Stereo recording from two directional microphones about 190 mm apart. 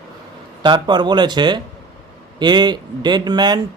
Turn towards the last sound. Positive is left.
turn(degrees=-20)  # may be behind; listen again after turning